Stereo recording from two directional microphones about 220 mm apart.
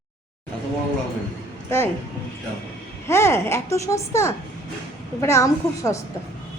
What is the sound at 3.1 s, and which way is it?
Speech, 10° left (ahead or behind).